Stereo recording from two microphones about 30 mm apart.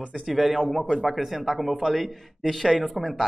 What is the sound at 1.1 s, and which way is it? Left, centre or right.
Speech, centre.